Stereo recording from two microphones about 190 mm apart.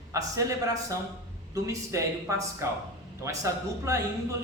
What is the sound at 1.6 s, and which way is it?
Speech, 15° right (ahead or behind).